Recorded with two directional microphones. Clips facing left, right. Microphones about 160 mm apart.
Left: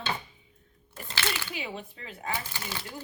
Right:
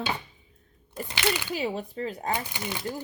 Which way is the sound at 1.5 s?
40° right (ahead or behind).